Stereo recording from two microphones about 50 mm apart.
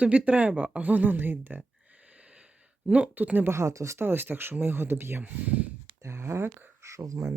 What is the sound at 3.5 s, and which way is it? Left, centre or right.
Speech, right.